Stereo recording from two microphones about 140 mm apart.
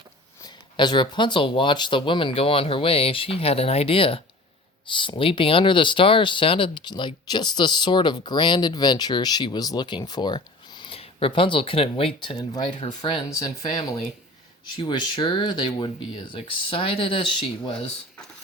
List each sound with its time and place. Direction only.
0.4 s speech: 30° left (ahead or behind)